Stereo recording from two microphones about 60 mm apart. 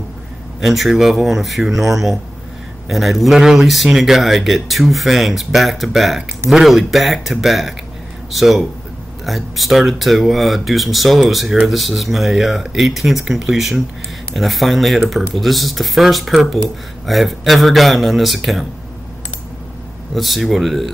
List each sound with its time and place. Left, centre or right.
0.6 s speech: centre
20.2 s speech: centre